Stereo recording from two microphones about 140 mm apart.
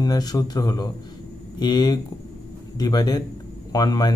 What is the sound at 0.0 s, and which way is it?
A man's voice, 25° left (ahead or behind).